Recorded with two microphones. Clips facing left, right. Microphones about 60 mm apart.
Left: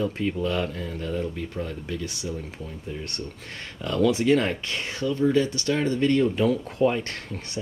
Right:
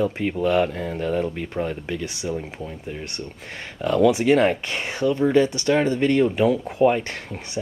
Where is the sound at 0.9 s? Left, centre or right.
Right.